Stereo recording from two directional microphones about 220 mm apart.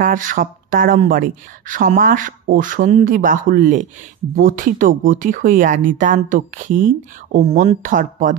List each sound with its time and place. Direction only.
0.0 s speech: 35° right (ahead or behind)